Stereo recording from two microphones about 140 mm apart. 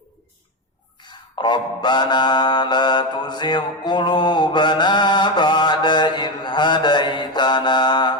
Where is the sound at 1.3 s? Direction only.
30° left (ahead or behind).